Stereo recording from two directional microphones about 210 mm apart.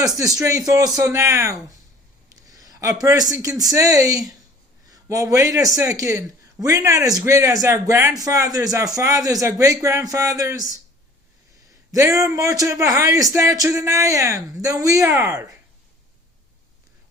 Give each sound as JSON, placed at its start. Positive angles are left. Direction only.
{"t": 0.0, "sound": "speech", "side_deg": -15}
{"t": 11.9, "sound": "a man's voice", "side_deg": -15}